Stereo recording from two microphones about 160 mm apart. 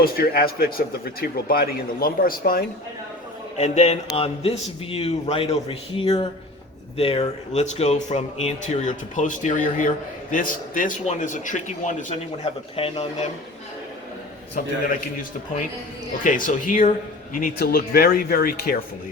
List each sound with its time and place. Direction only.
0.0 s speech: 70° left (ahead or behind)
3.6 s speech: 40° left (ahead or behind)
12.7 s speech: 40° left (ahead or behind)
16.2 s speech: 55° left (ahead or behind)
17.3 s speech: 65° left (ahead or behind)